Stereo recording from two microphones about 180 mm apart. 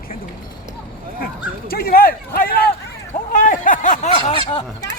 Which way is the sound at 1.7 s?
55° left (ahead or behind).